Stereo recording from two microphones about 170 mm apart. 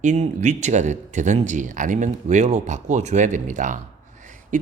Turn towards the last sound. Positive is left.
turn(degrees=-50)  # may be behind; listen again after turning